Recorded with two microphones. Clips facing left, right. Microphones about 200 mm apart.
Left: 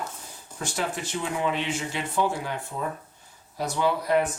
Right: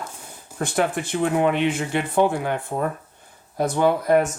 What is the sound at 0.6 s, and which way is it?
Speech, 55° right (ahead or behind).